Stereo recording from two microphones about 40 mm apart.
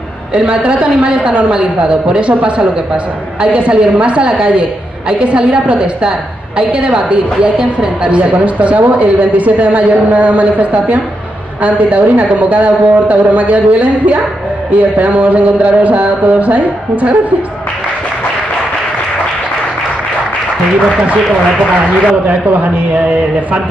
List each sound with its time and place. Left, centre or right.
0.3 s a woman's voice: right
8.2 s a woman's voice: right